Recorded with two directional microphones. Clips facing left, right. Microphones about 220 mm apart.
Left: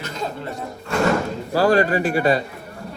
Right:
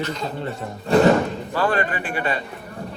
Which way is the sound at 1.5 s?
40° left (ahead or behind).